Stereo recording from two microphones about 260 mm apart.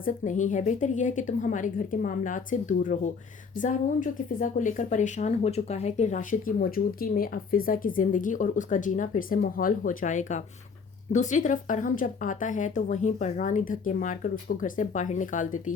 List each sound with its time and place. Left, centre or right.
0.0 s speech: left